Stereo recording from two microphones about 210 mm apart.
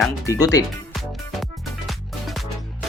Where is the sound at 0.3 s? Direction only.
15° left (ahead or behind).